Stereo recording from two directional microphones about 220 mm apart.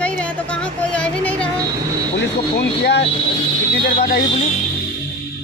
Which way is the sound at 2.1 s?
50° left (ahead or behind).